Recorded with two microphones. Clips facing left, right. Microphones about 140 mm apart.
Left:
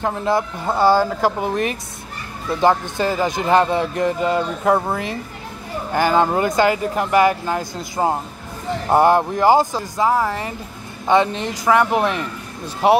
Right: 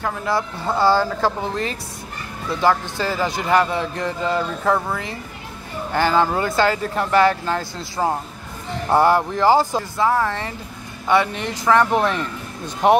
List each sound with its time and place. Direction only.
0.0 s a man's voice: 20° left (ahead or behind)
8.8 s speech: 20° left (ahead or behind)